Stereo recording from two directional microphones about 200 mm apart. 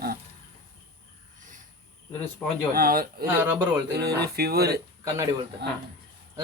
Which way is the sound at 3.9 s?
55° right (ahead or behind).